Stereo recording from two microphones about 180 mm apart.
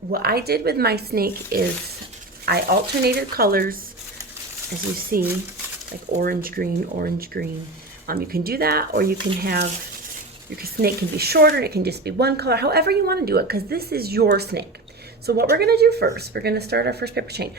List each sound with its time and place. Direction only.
0.1 s speech: 60° right (ahead or behind)
5.1 s speech: 50° right (ahead or behind)